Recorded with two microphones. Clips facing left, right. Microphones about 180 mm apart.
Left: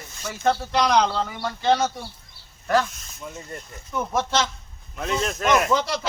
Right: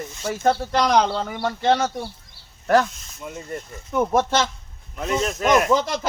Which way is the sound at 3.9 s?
50° right (ahead or behind).